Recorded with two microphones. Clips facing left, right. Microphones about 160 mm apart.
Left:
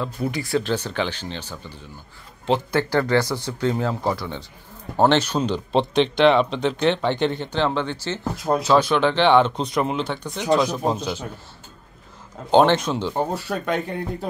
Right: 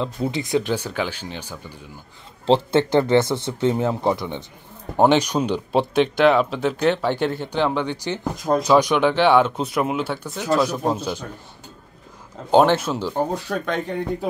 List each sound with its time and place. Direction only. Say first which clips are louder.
0.0 s speech: right 2 dB; 20° right (ahead or behind)
2.4 s speech: right 4 dB; 25° right (ahead or behind); by 11.2 s 10° right (ahead or behind)
12.4 s speech: even; 5° right (ahead or behind)
13.3 s speech: even; 5° left (ahead or behind)